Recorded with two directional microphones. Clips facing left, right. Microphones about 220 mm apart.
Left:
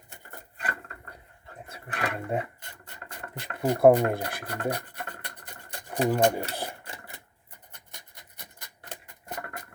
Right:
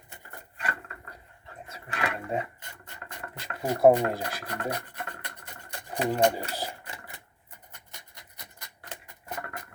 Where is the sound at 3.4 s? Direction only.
55° left (ahead or behind).